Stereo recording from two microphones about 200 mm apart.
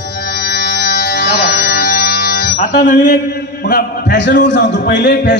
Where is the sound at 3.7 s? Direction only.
50° left (ahead or behind).